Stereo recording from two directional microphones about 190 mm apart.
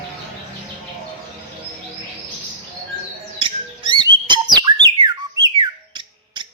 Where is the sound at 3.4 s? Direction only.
25° right (ahead or behind).